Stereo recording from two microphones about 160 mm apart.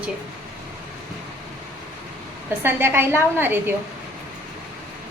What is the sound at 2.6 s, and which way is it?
Speech, 15° right (ahead or behind).